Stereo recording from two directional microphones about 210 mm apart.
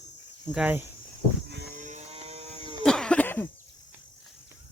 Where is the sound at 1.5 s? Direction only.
55° right (ahead or behind).